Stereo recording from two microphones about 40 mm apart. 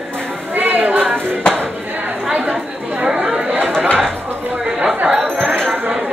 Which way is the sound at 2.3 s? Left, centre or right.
Right.